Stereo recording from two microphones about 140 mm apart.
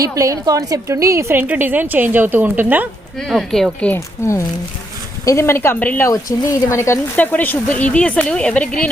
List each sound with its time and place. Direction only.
0.0 s a woman's voice: 25° right (ahead or behind)
3.2 s speech: centre (ahead or behind)
5.2 s a woman's voice: 20° left (ahead or behind)